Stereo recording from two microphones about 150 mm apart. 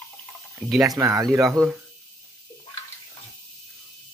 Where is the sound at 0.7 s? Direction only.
Centre (ahead or behind).